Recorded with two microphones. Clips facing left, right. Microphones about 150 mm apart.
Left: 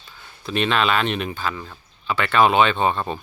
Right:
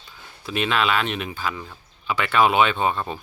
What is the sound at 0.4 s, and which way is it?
Speech, 5° right (ahead or behind).